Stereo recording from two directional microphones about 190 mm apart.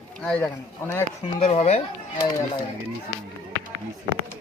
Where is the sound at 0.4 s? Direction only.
15° left (ahead or behind).